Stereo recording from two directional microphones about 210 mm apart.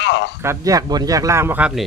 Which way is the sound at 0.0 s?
55° left (ahead or behind).